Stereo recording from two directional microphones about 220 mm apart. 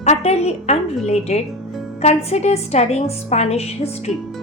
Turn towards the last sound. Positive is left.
turn(degrees=30)  # may be behind; listen again after turning